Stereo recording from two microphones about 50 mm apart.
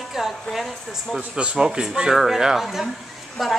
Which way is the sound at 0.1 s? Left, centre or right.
Centre.